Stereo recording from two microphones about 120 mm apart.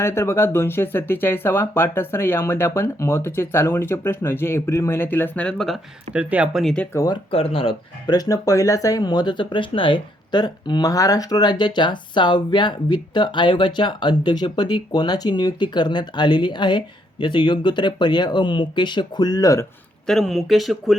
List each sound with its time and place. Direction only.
0.0 s speech: 20° left (ahead or behind); by 5.8 s centre (ahead or behind)
6.1 s speech: 10° right (ahead or behind)
6.9 s speech: 30° left (ahead or behind)
7.3 s speech: 50° left (ahead or behind)
8.1 s speech: 30° left (ahead or behind)
20.1 s speech: 5° left (ahead or behind)